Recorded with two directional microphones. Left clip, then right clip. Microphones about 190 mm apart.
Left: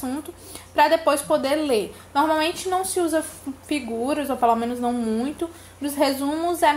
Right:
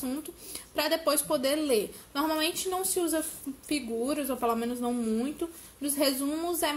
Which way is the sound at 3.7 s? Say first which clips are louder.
Left 6 dB; 40° right (ahead or behind).